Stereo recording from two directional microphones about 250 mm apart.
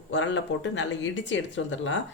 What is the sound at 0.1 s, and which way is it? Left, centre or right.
Speech, left.